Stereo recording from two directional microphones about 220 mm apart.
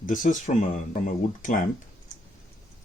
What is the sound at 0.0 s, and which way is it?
Speech, 35° left (ahead or behind).